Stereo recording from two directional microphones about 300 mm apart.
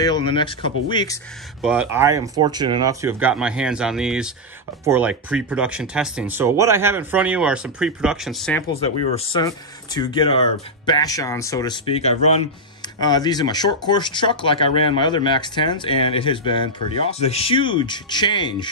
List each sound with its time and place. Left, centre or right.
0.0 s speech: centre
1.6 s speech: centre
8.7 s speech: centre